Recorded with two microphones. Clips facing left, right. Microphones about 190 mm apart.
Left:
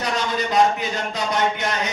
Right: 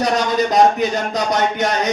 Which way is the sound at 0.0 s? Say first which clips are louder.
Right 7 dB; 40° right (ahead or behind).